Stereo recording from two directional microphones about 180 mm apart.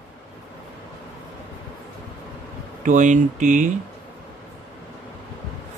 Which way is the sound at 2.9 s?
45° right (ahead or behind).